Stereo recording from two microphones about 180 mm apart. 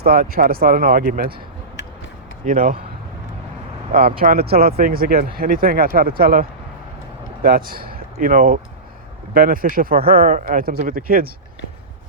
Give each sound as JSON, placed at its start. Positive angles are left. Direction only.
{"t": 0.0, "sound": "speech", "side_deg": -55}
{"t": 2.4, "sound": "speech", "side_deg": -50}
{"t": 3.9, "sound": "speech", "side_deg": -55}